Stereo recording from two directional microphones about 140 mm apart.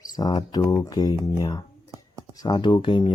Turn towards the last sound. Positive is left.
turn(degrees=35)  # may be behind; listen again after turning